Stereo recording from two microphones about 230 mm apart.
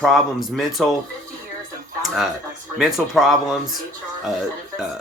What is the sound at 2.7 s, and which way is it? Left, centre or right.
Speech, centre.